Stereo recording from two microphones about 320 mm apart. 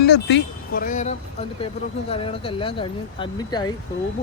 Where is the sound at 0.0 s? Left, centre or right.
Left; by 3.7 s centre.